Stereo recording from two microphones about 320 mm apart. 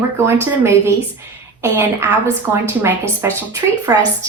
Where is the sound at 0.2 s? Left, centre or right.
Centre.